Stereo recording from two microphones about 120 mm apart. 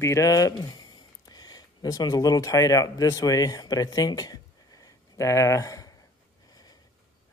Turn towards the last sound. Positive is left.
turn(degrees=30)  # may be behind; listen again after turning